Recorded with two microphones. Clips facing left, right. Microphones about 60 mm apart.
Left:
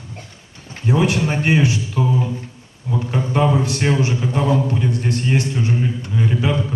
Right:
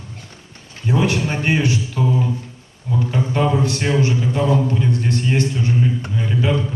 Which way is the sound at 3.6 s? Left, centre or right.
Left.